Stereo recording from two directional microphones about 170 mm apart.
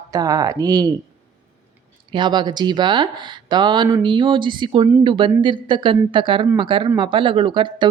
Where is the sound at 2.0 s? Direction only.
25° right (ahead or behind).